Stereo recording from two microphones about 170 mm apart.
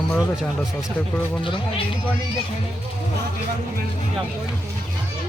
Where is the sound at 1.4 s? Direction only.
30° left (ahead or behind).